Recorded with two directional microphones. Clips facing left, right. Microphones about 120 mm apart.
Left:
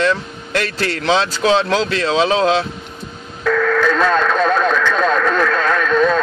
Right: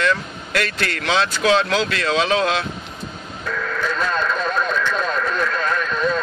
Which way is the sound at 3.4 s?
90° left.